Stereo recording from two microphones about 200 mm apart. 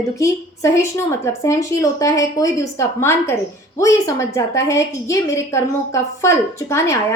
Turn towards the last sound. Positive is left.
turn(degrees=15)  # may be behind; listen again after turning